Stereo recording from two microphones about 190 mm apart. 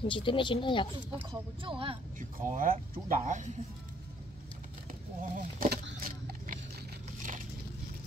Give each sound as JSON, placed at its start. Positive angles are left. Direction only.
{"t": 0.0, "sound": "speech", "side_deg": 25}
{"t": 1.3, "sound": "speech", "side_deg": -25}
{"t": 2.1, "sound": "speech", "side_deg": -45}
{"t": 5.3, "sound": "speech", "side_deg": -45}
{"t": 5.9, "sound": "a sound", "side_deg": -45}